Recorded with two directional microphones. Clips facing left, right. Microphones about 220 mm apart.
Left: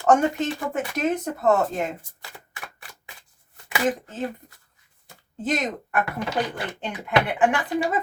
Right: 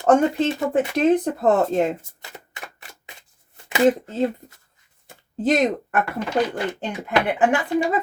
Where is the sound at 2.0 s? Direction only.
20° right (ahead or behind).